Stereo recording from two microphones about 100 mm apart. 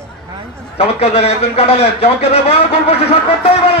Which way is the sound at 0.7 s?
85° left.